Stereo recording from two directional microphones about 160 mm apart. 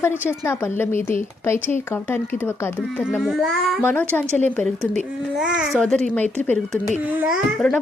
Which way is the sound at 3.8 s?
10° left (ahead or behind).